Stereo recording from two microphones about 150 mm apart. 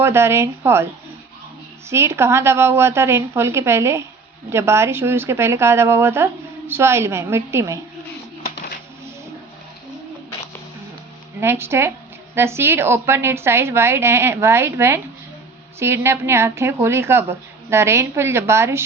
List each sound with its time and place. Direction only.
0.0 s speech: 15° right (ahead or behind)
1.9 s speech: 15° right (ahead or behind)
11.3 s speech: 15° right (ahead or behind)